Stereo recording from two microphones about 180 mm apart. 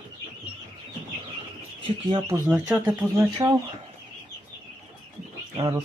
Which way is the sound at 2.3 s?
5° right (ahead or behind).